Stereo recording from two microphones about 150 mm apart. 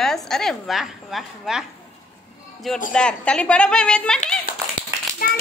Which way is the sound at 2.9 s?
5° left (ahead or behind).